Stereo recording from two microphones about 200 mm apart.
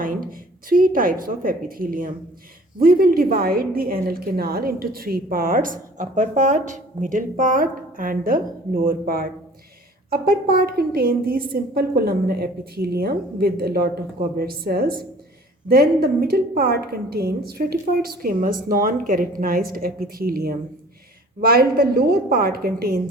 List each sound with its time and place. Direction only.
0.0 s a woman's voice: 45° right (ahead or behind)